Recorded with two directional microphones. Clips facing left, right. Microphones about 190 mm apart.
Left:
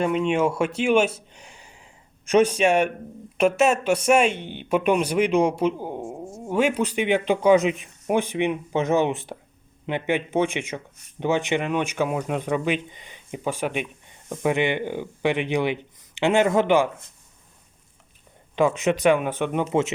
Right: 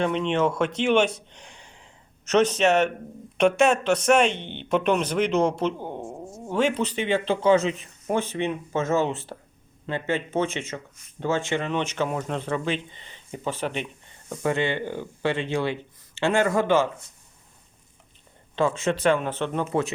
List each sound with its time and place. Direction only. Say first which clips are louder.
0.0 s speech: left 2 dB; 10° left (ahead or behind)
18.5 s speech: left 3 dB; 15° left (ahead or behind)